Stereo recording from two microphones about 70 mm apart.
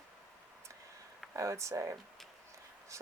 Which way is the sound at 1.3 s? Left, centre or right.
Right.